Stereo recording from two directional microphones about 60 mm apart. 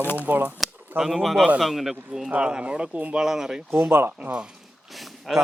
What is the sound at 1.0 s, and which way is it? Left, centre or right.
Speech, centre.